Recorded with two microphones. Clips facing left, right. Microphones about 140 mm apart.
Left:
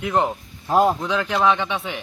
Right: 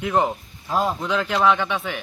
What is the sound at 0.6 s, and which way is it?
Speech, 50° left (ahead or behind).